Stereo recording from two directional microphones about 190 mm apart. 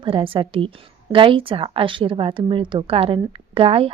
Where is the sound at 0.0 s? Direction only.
30° right (ahead or behind).